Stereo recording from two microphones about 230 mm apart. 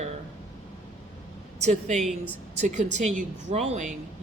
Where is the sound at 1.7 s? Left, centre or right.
Right.